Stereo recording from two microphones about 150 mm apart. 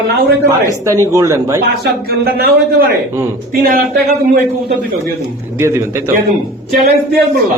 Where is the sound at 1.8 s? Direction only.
90° right.